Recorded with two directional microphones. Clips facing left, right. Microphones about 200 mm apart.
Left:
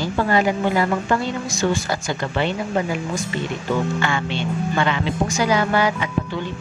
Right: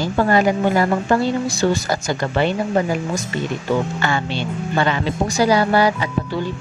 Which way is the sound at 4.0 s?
35° right (ahead or behind).